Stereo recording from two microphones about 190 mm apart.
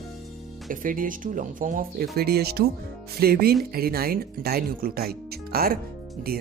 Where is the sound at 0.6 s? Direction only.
45° right (ahead or behind).